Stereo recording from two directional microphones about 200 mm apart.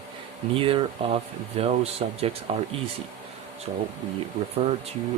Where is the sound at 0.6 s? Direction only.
25° right (ahead or behind).